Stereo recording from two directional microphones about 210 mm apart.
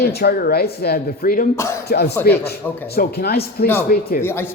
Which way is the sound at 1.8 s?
50° left (ahead or behind).